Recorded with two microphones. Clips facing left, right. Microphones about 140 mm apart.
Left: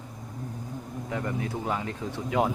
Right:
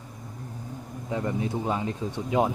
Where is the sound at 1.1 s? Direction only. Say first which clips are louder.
Right 3 dB; 20° right (ahead or behind).